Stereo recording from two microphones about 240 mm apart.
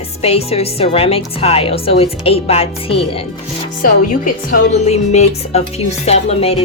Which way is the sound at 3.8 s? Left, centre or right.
Left.